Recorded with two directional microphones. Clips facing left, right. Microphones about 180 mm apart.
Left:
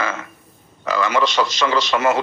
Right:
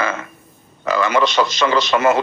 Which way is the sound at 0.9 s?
55° right (ahead or behind).